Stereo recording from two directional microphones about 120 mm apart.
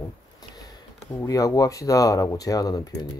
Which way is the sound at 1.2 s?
30° left (ahead or behind).